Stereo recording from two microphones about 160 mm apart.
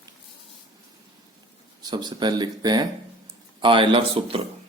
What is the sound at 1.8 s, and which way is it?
Speech, 25° right (ahead or behind).